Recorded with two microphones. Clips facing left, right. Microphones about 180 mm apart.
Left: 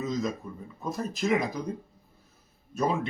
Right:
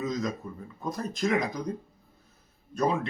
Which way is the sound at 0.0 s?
Centre (ahead or behind).